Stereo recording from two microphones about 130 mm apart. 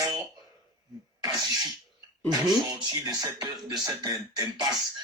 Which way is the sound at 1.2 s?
35° right (ahead or behind).